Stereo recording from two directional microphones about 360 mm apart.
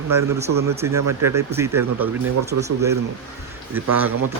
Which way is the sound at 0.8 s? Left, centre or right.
Centre.